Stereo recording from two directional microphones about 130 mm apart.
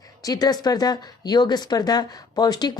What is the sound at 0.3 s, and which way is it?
Speech, 30° left (ahead or behind).